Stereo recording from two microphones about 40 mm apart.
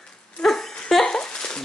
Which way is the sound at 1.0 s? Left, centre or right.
Centre.